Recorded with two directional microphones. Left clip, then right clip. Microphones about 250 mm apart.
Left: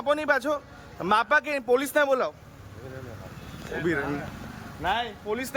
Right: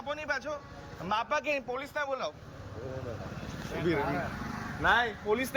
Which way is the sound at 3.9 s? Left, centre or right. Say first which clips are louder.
Left 2 dB; centre.